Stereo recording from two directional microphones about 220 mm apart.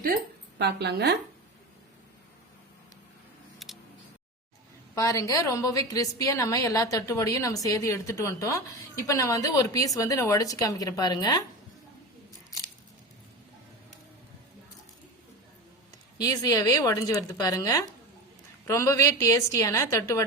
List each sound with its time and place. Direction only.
0.6 s speech: 50° right (ahead or behind)
3.6 s a sound: centre (ahead or behind)
4.9 s a woman's voice: 15° left (ahead or behind)
16.1 s a woman's voice: 15° left (ahead or behind)